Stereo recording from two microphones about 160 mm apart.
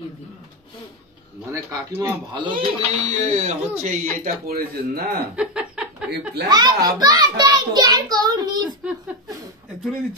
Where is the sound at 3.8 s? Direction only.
55° right (ahead or behind); by 5.2 s 75° right (ahead or behind).